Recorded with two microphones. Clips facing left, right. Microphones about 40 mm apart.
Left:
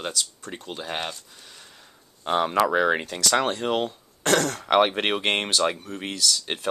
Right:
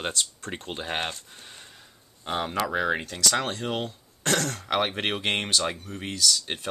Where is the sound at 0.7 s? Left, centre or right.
Right.